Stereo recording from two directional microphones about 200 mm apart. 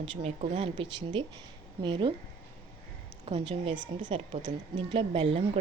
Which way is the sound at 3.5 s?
30° right (ahead or behind).